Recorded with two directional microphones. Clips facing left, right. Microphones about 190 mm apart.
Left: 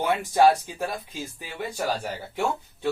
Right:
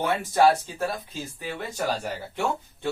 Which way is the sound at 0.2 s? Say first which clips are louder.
Left 1 dB; 15° left (ahead or behind).